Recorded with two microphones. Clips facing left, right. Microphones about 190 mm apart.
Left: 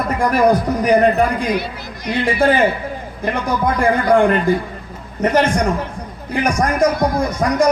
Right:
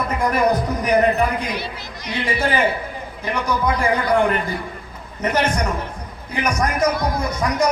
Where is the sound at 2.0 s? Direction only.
50° left (ahead or behind).